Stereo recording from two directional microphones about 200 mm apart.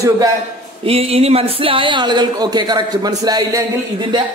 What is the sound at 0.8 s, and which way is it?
Speech, 30° right (ahead or behind).